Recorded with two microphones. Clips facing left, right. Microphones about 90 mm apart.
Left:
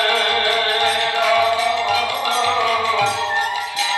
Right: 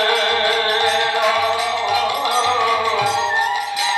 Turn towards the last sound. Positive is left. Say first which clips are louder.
# right 1 dB
turn(degrees=-20)  # may be behind; listen again after turning